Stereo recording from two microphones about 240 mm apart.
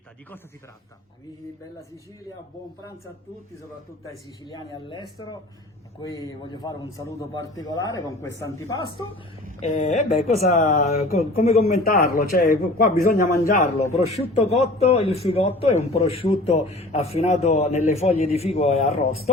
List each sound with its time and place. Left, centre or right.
4.0 s a man's voice: centre
6.1 s a man's voice: centre
9.6 s a man's voice: left
11.6 s a man's voice: left